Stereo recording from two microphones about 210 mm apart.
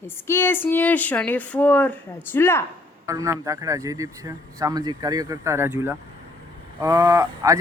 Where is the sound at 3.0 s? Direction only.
15° right (ahead or behind).